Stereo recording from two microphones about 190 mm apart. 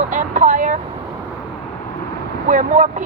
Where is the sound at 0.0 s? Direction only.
40° right (ahead or behind).